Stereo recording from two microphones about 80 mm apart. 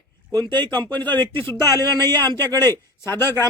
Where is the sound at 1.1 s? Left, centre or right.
Left.